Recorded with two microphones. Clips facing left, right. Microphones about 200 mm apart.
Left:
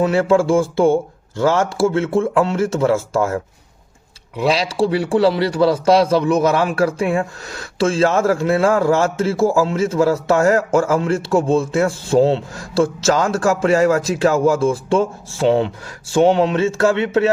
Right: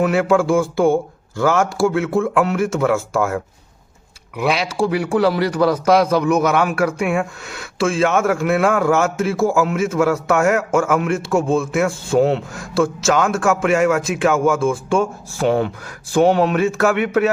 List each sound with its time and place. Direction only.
0.0 s a man's voice: 30° left (ahead or behind)